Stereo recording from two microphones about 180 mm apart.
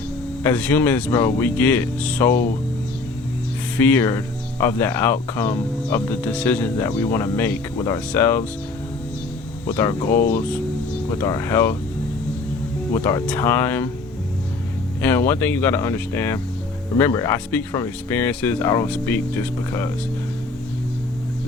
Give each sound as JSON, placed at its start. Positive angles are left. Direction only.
{"t": 0.4, "sound": "speech", "side_deg": 10}
{"t": 3.8, "sound": "speech", "side_deg": 10}
{"t": 9.7, "sound": "speech", "side_deg": 15}
{"t": 12.9, "sound": "speech", "side_deg": 15}
{"t": 15.0, "sound": "speech", "side_deg": 10}